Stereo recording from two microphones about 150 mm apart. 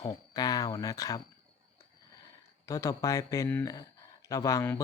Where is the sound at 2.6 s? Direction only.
20° left (ahead or behind).